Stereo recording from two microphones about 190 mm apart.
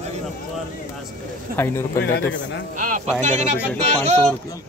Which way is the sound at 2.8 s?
40° right (ahead or behind).